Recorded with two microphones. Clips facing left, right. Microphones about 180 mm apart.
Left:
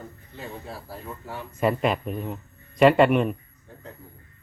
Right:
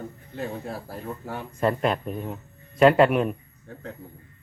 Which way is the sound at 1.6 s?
5° left (ahead or behind).